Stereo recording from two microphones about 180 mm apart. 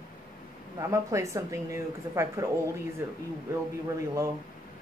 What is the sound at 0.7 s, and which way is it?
A woman's voice, 15° right (ahead or behind).